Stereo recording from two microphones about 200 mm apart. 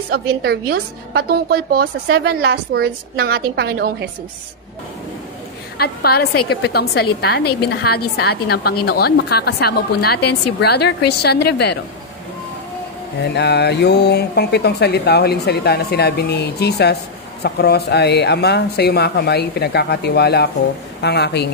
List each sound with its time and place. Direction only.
0.1 s a woman's voice: 50° right (ahead or behind)
5.8 s a woman's voice: 50° left (ahead or behind)
13.3 s speech: 55° left (ahead or behind)